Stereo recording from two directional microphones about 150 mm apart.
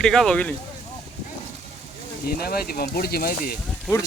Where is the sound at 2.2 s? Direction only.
90° left.